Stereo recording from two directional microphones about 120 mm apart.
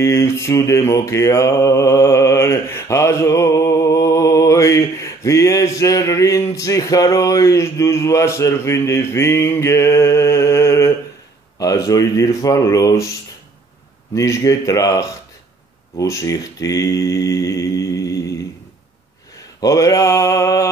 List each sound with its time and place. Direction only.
0.0 s mantra: 25° left (ahead or behind)
14.1 s mantra: 25° left (ahead or behind)
16.0 s speech: 30° left (ahead or behind)
19.6 s mantra: 30° left (ahead or behind)